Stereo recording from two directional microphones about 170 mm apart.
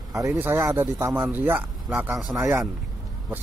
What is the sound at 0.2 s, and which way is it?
A man's voice, 15° right (ahead or behind).